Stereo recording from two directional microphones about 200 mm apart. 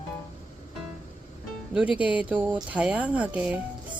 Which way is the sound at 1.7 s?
5° right (ahead or behind).